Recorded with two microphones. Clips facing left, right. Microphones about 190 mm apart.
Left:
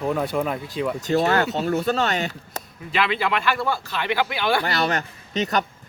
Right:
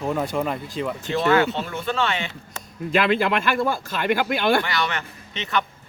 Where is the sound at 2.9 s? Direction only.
45° right (ahead or behind).